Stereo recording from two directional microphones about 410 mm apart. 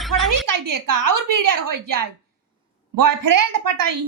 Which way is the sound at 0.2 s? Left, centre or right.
Right.